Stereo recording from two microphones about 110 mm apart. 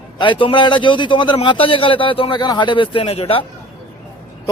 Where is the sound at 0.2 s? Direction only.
50° left (ahead or behind).